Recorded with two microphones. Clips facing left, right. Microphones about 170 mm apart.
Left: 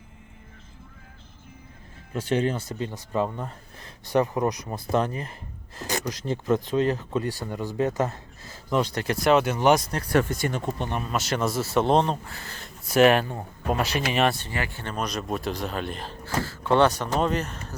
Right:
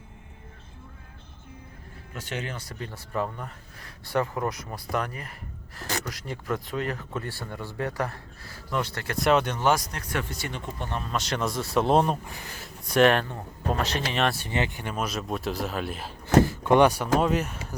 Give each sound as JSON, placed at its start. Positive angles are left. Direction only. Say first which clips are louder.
{"t": 2.1, "sound": "speech", "louder": "left 10 dB", "side_deg": 30}
{"t": 9.1, "sound": "speech", "louder": "left 2 dB", "side_deg": 0}
{"t": 9.6, "sound": "speech", "louder": "left 4 dB", "side_deg": 20}
{"t": 9.9, "sound": "speech", "louder": "left 9 dB", "side_deg": 35}
{"t": 10.8, "sound": "speech", "louder": "left 3 dB", "side_deg": 15}
{"t": 11.0, "sound": "speech", "louder": "left 2 dB", "side_deg": 5}
{"t": 12.6, "sound": "speech", "louder": "left 2 dB", "side_deg": 5}
{"t": 14.3, "sound": "speech", "louder": "right 3 dB", "side_deg": -20}
{"t": 16.2, "sound": "speech", "louder": "right 9 dB", "side_deg": -20}